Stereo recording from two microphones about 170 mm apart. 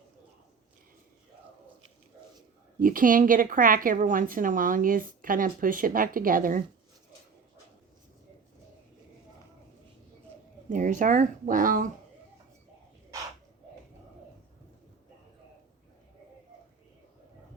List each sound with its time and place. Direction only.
2.7 s a woman's voice: 55° right (ahead or behind)
10.7 s a woman's voice: 50° right (ahead or behind)